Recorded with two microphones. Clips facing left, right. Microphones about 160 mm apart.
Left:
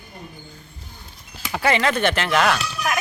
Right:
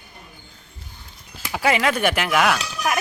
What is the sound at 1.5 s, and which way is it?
Speech, 5° right (ahead or behind).